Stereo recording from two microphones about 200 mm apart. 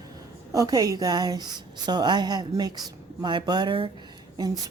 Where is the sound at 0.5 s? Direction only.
20° right (ahead or behind).